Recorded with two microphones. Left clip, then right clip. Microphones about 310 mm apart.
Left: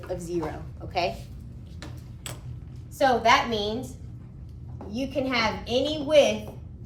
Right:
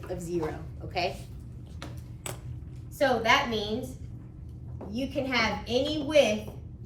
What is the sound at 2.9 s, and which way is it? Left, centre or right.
Speech, centre.